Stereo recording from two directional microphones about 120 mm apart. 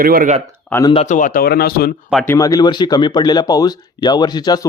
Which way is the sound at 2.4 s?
30° left (ahead or behind).